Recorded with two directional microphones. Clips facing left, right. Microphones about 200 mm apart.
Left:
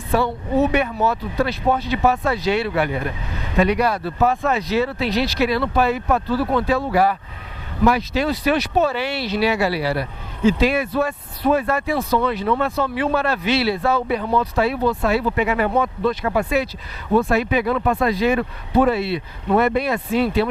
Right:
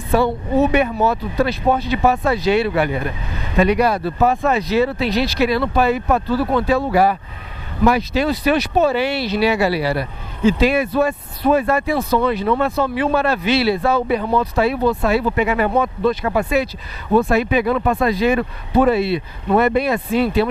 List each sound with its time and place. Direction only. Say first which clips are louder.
0.1 s speech: right 3 dB; 10° right (ahead or behind)
14.2 s speech: right 2 dB; 20° right (ahead or behind)